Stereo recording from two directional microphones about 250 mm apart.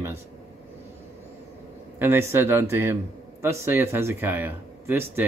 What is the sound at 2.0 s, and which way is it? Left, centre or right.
Speech, centre.